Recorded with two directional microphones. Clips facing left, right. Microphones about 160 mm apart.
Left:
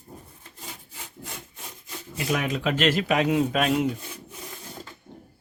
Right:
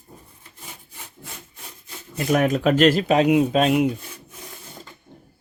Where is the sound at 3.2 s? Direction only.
15° right (ahead or behind).